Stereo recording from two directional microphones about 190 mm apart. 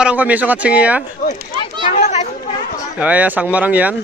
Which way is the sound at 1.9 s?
35° left (ahead or behind).